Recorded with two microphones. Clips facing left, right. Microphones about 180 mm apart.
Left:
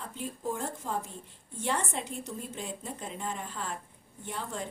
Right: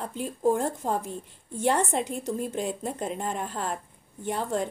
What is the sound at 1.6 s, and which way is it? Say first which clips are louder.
A woman's voice: right 8 dB; 70° right (ahead or behind).